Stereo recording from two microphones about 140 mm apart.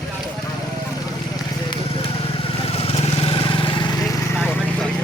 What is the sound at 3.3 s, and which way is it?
Vehicle, 40° left (ahead or behind).